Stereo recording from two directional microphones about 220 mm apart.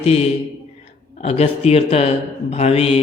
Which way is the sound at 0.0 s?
25° left (ahead or behind).